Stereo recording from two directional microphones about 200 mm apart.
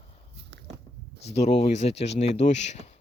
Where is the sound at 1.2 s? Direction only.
30° left (ahead or behind).